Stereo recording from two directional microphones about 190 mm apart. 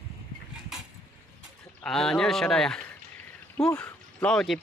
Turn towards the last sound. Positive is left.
turn(degrees=0)  # may be behind; listen again after turning